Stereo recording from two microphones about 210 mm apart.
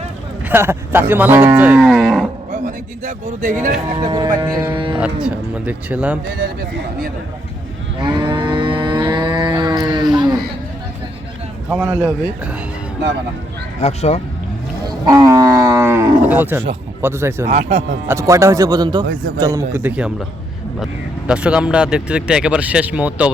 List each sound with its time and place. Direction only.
0.4 s speech: 10° right (ahead or behind)
2.6 s a man's voice: 40° right (ahead or behind)
3.9 s speech: 20° right (ahead or behind)
4.9 s speech: 5° right (ahead or behind)
6.2 s speech: 45° right (ahead or behind)
8.0 s livestock: 20° right (ahead or behind)
11.7 s speech: 10° right (ahead or behind)
13.8 s speech: 30° left (ahead or behind)
14.8 s speech: 20° right (ahead or behind)
17.4 s a man's voice: 30° right (ahead or behind)
18.1 s speech: 15° right (ahead or behind)